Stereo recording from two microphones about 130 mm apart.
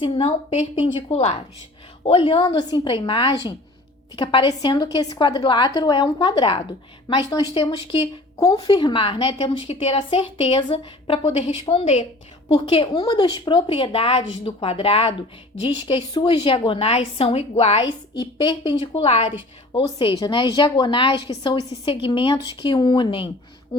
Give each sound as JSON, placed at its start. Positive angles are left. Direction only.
{"t": 0.0, "sound": "a woman's voice", "side_deg": 45}
{"t": 17.8, "sound": "a woman's voice", "side_deg": 35}
{"t": 19.7, "sound": "a woman's voice", "side_deg": 40}